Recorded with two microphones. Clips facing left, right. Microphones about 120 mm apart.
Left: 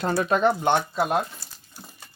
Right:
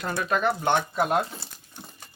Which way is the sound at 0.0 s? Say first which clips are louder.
Left 4 dB; 30° left (ahead or behind).